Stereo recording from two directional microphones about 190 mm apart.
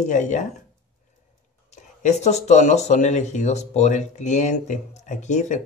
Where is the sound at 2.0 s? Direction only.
40° left (ahead or behind).